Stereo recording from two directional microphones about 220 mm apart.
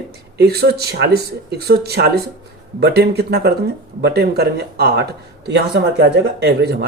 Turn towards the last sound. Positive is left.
turn(degrees=-50)  # may be behind; listen again after turning